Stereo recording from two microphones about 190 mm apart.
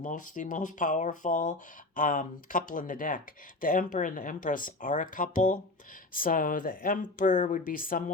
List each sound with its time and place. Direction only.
0.0 s speech: 45° left (ahead or behind)